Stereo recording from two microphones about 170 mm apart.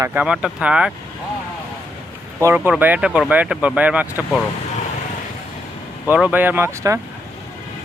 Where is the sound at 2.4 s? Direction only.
10° right (ahead or behind).